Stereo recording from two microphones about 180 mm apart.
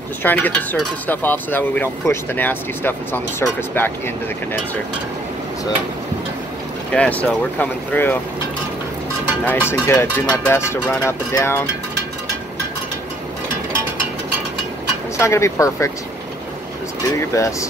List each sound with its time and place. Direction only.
0.2 s speech: 10° left (ahead or behind)
6.9 s speech: 5° left (ahead or behind)
9.4 s speech: 10° left (ahead or behind)
15.1 s speech: 15° left (ahead or behind)
17.2 s speech: 15° left (ahead or behind)